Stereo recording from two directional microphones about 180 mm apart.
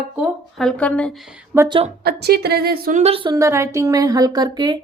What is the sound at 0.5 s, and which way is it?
Speech, 5° left (ahead or behind).